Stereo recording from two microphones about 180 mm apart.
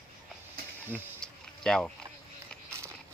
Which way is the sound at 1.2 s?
5° left (ahead or behind).